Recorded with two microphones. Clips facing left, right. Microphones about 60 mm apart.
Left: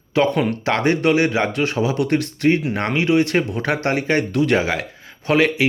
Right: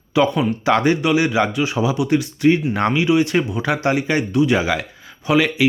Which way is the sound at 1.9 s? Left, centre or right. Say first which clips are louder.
Right 1 dB; left.